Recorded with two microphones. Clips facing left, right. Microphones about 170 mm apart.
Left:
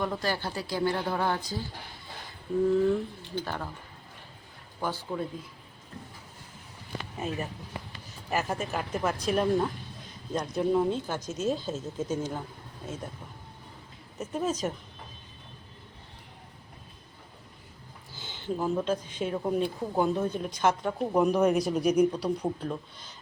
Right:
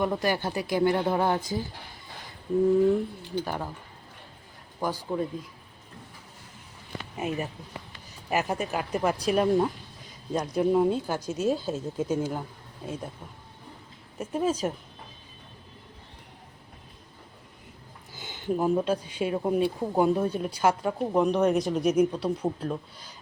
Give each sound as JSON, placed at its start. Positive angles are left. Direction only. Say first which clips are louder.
{"t": 0.0, "sound": "speech", "louder": "right 4 dB", "side_deg": -15}
{"t": 3.3, "sound": "speech", "louder": "right 3 dB", "side_deg": -10}
{"t": 4.8, "sound": "speech", "louder": "right 3 dB", "side_deg": -10}
{"t": 7.2, "sound": "speech", "louder": "right 3 dB", "side_deg": -15}
{"t": 8.5, "sound": "speech", "louder": "right 3 dB", "side_deg": -5}
{"t": 14.2, "sound": "speech", "louder": "right 3 dB", "side_deg": -10}
{"t": 18.2, "sound": "speech", "louder": "right 4 dB", "side_deg": -15}